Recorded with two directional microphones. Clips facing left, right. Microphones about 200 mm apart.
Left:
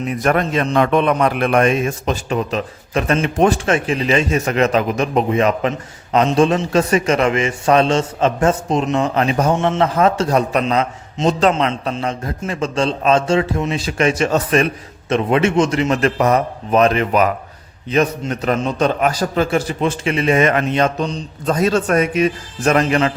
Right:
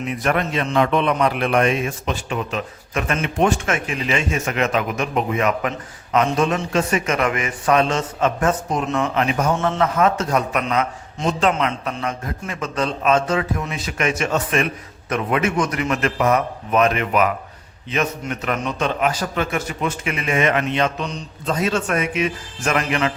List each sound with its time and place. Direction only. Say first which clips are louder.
0.1 s a man's voice: left 4 dB; 40° left (ahead or behind)